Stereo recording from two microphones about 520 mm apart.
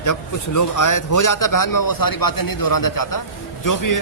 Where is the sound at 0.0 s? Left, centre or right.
Left.